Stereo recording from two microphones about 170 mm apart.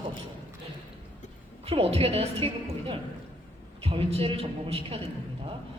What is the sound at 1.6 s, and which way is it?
A man's voice, 35° right (ahead or behind).